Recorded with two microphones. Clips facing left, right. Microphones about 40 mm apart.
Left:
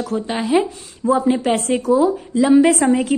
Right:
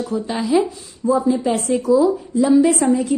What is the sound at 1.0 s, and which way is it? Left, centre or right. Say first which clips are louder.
A woman's voice: left 1 dB; left.